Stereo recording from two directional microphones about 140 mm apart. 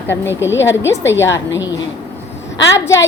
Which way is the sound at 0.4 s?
20° left (ahead or behind).